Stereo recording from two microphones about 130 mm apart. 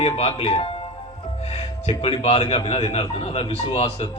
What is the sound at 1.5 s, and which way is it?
Music, 50° left (ahead or behind).